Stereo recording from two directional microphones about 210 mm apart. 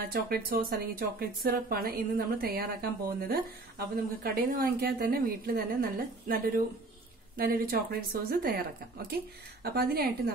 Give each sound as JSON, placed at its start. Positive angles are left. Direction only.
{"t": 0.1, "sound": "speech", "side_deg": -45}
{"t": 9.6, "sound": "speech", "side_deg": -45}